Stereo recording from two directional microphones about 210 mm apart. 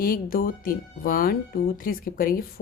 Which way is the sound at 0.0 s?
45° left (ahead or behind).